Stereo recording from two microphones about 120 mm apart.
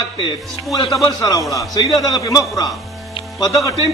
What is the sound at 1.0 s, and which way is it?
A man's voice, 30° left (ahead or behind).